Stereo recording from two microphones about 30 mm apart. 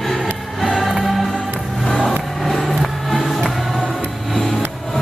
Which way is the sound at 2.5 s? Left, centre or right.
Centre.